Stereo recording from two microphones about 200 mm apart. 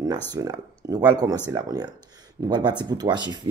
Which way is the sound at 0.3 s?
20° right (ahead or behind).